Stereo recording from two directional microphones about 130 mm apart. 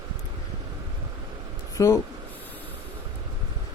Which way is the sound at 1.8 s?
25° left (ahead or behind).